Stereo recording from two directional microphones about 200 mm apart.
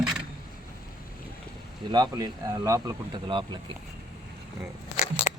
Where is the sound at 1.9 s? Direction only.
20° right (ahead or behind).